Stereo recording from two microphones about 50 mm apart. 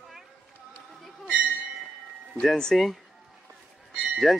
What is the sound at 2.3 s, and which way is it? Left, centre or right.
Speech, centre.